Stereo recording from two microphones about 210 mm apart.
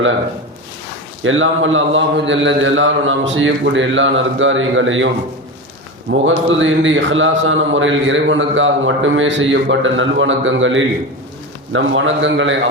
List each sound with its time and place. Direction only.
1.2 s speech: 70° right (ahead or behind)
6.1 s speech: 65° right (ahead or behind)